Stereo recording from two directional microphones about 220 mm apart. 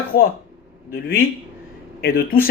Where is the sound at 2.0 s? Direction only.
45° left (ahead or behind).